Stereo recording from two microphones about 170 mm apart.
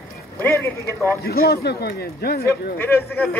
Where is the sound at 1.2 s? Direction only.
65° left (ahead or behind).